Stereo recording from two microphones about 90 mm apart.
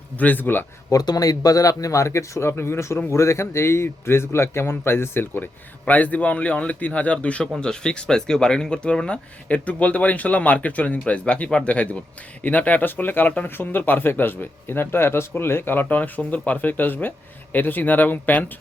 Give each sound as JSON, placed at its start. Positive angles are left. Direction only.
{"t": 0.2, "sound": "speech", "side_deg": 20}
{"t": 0.9, "sound": "speech", "side_deg": 45}